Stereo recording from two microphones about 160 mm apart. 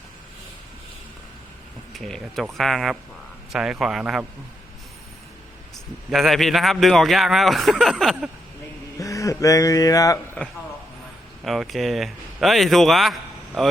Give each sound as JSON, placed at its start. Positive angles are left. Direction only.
{"t": 1.9, "sound": "a man's voice", "side_deg": 0}
{"t": 6.1, "sound": "a man's voice", "side_deg": 0}
{"t": 9.0, "sound": "speech", "side_deg": 20}
{"t": 11.4, "sound": "a man's voice", "side_deg": 0}